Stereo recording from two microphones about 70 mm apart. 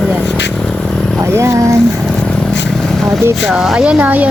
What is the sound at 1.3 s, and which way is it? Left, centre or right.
Speech, right.